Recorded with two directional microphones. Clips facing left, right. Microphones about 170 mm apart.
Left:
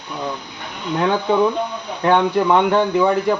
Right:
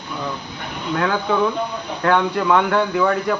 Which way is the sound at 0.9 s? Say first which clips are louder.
Left 3 dB; 20° left (ahead or behind).